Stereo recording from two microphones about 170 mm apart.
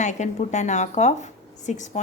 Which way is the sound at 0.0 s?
45° left (ahead or behind).